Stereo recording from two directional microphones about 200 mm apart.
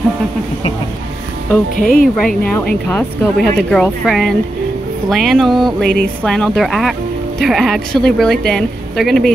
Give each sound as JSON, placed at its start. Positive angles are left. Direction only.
{"t": 1.8, "sound": "speech", "side_deg": 45}
{"t": 2.4, "sound": "speech", "side_deg": 10}